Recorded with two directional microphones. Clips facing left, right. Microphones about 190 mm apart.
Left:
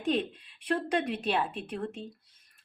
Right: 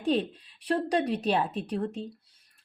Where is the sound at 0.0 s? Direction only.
35° right (ahead or behind).